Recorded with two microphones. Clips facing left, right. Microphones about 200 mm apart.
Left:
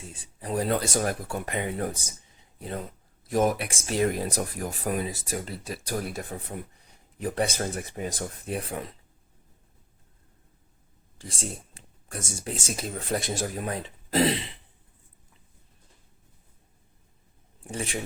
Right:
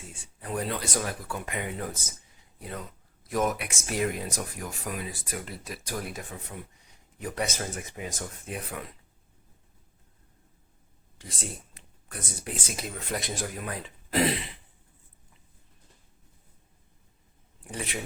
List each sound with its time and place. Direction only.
0.1 s speech: 35° left (ahead or behind)
11.2 s speech: 30° left (ahead or behind)
17.7 s speech: 30° left (ahead or behind)